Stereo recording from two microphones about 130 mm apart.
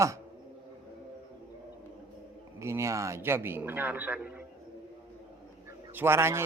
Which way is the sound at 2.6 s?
20° right (ahead or behind).